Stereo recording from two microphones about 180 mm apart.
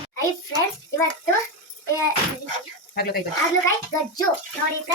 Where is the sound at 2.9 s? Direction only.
60° left (ahead or behind).